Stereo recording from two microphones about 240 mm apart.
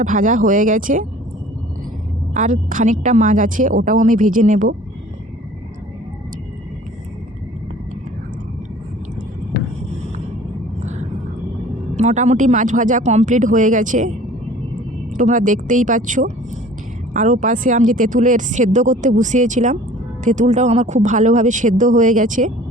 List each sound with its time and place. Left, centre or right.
0.0 s speech: right
2.3 s speech: right
11.9 s speech: right
15.1 s speech: right